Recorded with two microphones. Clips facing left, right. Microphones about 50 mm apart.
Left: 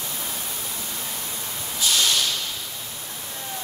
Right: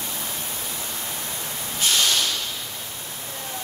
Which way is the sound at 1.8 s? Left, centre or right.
Right.